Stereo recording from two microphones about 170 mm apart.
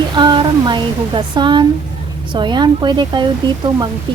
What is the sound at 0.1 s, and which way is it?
A woman's voice, 25° right (ahead or behind).